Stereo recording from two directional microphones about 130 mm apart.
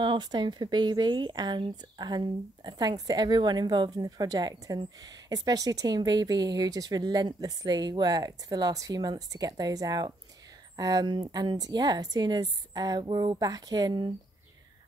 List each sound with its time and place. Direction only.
0.0 s speech: 35° right (ahead or behind)